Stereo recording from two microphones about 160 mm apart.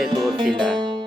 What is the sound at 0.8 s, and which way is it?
Music, 30° right (ahead or behind).